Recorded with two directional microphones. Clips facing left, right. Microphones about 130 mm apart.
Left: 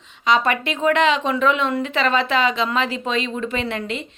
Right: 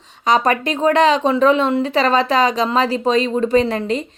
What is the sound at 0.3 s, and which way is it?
A woman's voice, 40° right (ahead or behind).